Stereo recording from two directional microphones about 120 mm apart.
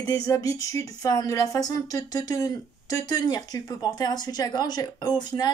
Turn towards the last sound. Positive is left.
turn(degrees=35)  # may be behind; listen again after turning